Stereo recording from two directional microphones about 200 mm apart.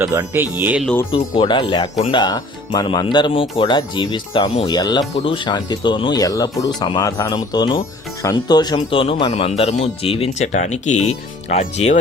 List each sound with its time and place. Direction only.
0.0 s speech: 15° right (ahead or behind)
1.4 s speech: 25° left (ahead or behind)